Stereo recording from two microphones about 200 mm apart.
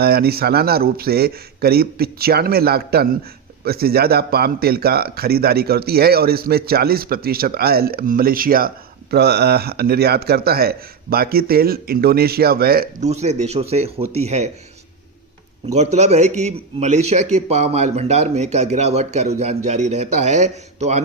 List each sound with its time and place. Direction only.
0.0 s speech: 50° right (ahead or behind)
13.1 s a man's voice: 35° right (ahead or behind)
15.7 s a man's voice: 35° right (ahead or behind)